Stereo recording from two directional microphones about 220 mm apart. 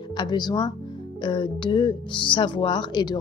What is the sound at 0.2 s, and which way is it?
A woman's voice, 20° left (ahead or behind).